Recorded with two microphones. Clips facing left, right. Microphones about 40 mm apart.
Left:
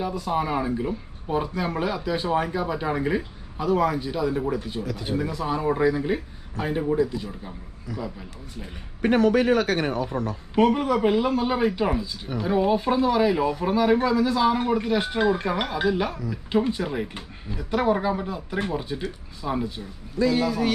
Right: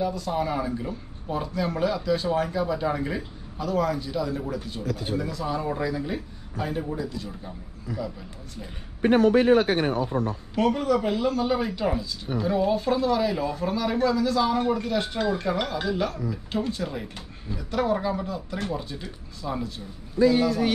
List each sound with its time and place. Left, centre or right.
0.0 s speech: centre
9.2 s speech: left
10.5 s speech: centre